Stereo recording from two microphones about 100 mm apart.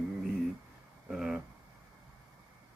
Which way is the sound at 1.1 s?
5° right (ahead or behind).